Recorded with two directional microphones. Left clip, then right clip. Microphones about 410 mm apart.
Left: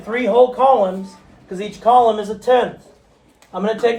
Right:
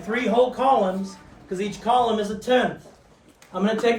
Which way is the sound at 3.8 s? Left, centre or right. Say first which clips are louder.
Left 4 dB; centre.